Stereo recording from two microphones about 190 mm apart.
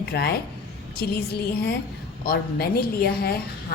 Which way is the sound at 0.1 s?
60° left (ahead or behind).